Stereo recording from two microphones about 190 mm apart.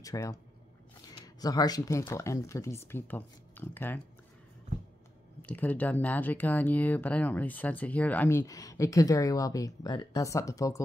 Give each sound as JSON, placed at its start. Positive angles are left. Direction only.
{"t": 0.0, "sound": "speech", "side_deg": 15}
{"t": 5.4, "sound": "speech", "side_deg": 10}